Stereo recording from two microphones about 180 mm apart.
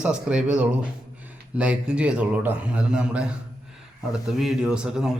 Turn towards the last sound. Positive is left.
turn(degrees=-5)  # may be behind; listen again after turning